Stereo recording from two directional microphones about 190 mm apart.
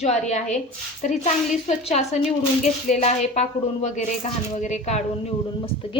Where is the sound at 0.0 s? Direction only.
35° left (ahead or behind).